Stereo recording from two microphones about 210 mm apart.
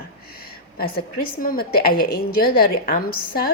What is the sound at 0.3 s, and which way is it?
A woman's voice, 45° left (ahead or behind).